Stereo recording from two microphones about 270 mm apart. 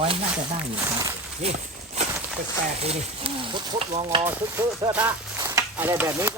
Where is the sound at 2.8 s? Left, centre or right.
Right.